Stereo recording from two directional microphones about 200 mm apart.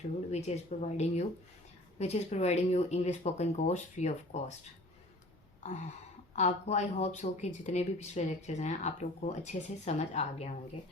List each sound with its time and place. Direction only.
0.3 s speech: 35° left (ahead or behind)
6.3 s speech: 35° left (ahead or behind)